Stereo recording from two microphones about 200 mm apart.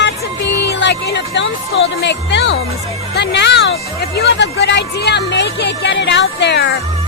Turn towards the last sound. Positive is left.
turn(degrees=60)  # may be behind; listen again after turning